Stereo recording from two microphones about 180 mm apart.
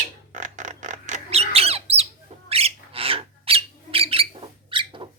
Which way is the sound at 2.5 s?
35° right (ahead or behind).